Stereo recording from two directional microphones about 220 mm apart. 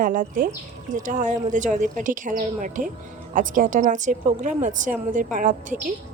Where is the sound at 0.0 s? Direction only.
40° right (ahead or behind).